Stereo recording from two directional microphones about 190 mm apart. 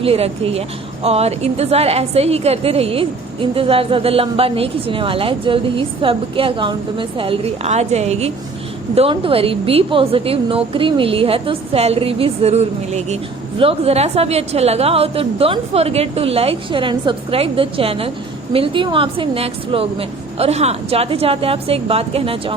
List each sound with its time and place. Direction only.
0.0 s a woman's voice: 30° right (ahead or behind)